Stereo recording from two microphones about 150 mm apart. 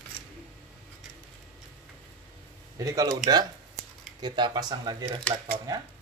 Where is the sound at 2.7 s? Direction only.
25° right (ahead or behind).